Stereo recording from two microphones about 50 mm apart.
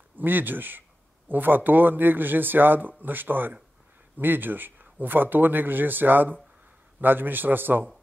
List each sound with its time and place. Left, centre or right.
0.2 s a man's voice: right